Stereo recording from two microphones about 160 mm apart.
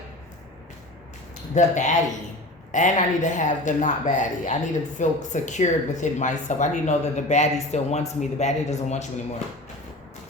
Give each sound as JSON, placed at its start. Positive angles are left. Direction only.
{"t": 1.5, "sound": "speech", "side_deg": 50}